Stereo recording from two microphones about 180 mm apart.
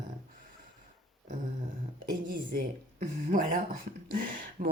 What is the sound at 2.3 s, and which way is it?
Speech, 55° right (ahead or behind).